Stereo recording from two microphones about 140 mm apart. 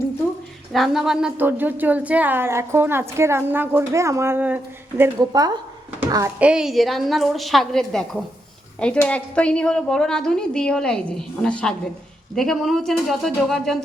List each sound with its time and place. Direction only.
0.7 s a woman's voice: centre (ahead or behind)
5.2 s a child's voice: 25° right (ahead or behind)
6.4 s a woman's voice: 5° right (ahead or behind)